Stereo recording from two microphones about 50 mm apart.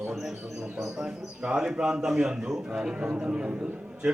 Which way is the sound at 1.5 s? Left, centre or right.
Centre.